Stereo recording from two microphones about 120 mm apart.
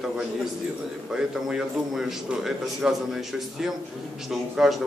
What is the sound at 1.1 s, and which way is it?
A man's voice, 5° right (ahead or behind).